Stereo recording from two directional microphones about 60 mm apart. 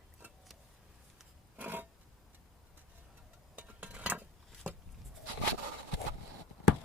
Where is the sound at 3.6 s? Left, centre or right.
Right.